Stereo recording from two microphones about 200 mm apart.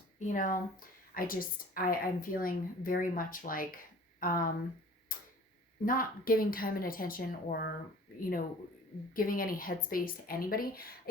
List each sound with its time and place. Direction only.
0.2 s a woman's voice: 40° left (ahead or behind)
5.1 s tick-tock: 45° left (ahead or behind)
5.8 s a woman's voice: 45° left (ahead or behind)
9.1 s a woman's voice: 45° left (ahead or behind)